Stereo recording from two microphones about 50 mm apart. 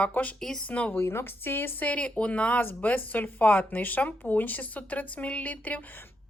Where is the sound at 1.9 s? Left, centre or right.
Left.